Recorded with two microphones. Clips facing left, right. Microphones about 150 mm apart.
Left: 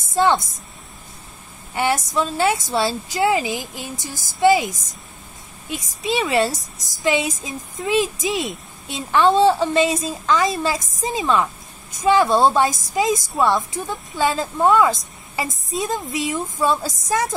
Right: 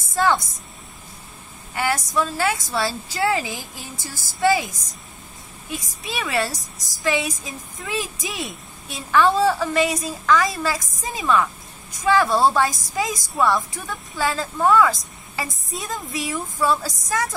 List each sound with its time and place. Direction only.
0.1 s a woman's voice: 25° left (ahead or behind)
1.8 s speech: 25° left (ahead or behind)
6.0 s speech: 25° left (ahead or behind)
6.5 s a woman's voice: centre (ahead or behind)
7.0 s speech: 20° left (ahead or behind)